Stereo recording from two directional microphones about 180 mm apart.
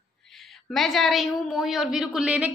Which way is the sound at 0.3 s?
Centre (ahead or behind).